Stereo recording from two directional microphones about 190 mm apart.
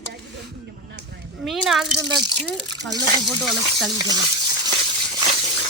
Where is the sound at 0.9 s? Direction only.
60° right (ahead or behind).